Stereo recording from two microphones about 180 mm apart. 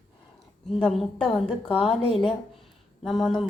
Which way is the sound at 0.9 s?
Centre (ahead or behind).